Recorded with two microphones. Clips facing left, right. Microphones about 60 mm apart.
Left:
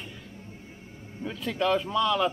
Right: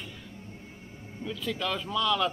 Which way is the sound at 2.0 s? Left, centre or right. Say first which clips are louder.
Right 1 dB; centre.